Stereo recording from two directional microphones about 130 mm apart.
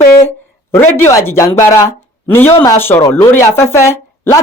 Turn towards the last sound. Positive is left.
turn(degrees=20)  # may be behind; listen again after turning